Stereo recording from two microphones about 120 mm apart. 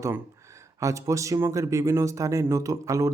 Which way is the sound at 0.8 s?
25° right (ahead or behind).